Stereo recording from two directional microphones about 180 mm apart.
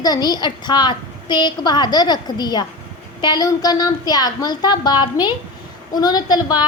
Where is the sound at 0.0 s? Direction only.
20° left (ahead or behind).